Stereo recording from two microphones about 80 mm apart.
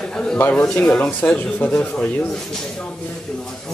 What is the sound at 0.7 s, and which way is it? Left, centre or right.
Speech, centre.